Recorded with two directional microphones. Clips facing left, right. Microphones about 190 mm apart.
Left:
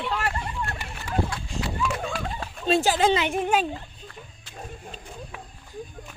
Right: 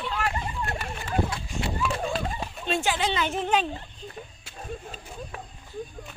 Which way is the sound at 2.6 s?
35° left (ahead or behind).